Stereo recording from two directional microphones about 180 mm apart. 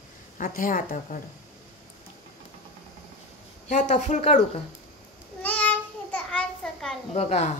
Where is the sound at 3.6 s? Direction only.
40° left (ahead or behind).